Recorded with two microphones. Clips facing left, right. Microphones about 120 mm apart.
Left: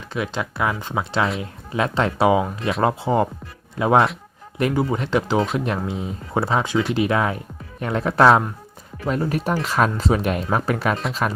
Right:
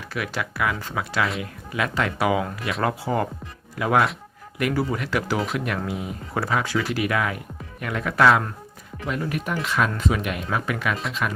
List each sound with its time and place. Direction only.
0.1 s speech: 25° left (ahead or behind)